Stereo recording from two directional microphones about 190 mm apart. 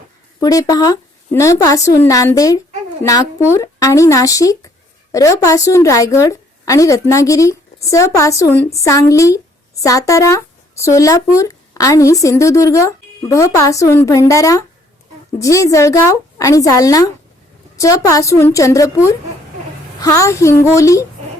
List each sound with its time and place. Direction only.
0.4 s speech: 20° left (ahead or behind)